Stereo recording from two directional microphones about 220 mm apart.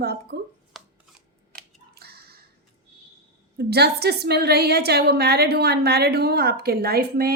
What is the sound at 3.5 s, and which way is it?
A woman's voice, 45° right (ahead or behind).